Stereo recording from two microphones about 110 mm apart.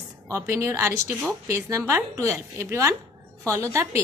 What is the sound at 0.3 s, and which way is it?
A woman's voice, 25° right (ahead or behind).